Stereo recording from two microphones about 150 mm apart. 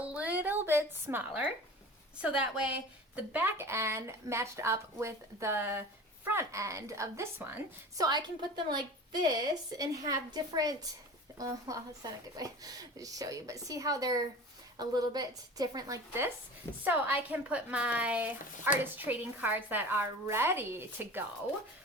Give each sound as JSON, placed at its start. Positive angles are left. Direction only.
{"t": 0.0, "sound": "music", "side_deg": -10}
{"t": 2.2, "sound": "speech", "side_deg": -10}
{"t": 7.9, "sound": "speech", "side_deg": -25}